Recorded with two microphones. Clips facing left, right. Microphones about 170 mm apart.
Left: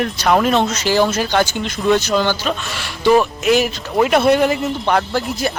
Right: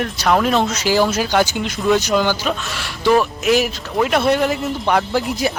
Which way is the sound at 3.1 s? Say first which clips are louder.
Left 2 dB; centre (ahead or behind).